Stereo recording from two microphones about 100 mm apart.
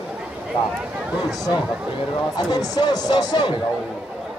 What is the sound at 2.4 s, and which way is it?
Speech, 45° left (ahead or behind).